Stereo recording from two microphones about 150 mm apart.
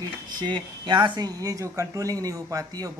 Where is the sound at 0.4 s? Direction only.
30° right (ahead or behind).